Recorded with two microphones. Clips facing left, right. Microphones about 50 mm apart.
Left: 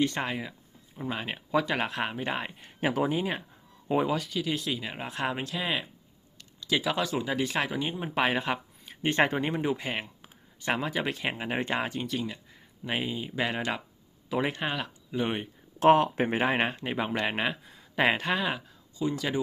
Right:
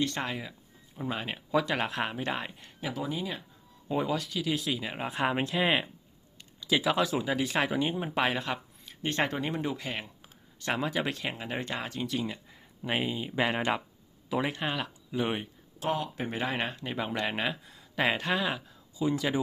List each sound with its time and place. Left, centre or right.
0.0 s speech: centre
2.8 s speech: left
3.8 s speech: centre
4.1 s speech: centre
5.3 s speech: right
6.6 s speech: centre
8.3 s speech: centre
10.6 s speech: centre
11.2 s speech: centre
12.2 s speech: centre
14.3 s speech: centre
15.8 s speech: left; by 19.4 s centre